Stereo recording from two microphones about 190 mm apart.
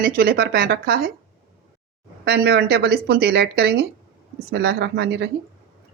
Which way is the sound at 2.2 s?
60° right (ahead or behind).